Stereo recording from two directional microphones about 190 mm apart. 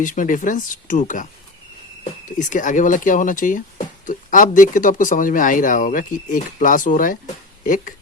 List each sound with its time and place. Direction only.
0.0 s speech: 45° left (ahead or behind)
2.4 s speech: 40° left (ahead or behind)